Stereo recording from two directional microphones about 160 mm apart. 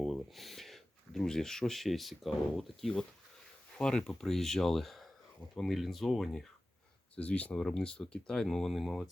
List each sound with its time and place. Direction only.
0.0 s speech: centre (ahead or behind)